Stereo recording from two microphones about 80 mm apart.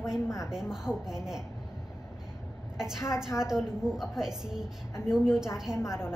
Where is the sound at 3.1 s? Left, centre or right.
Centre.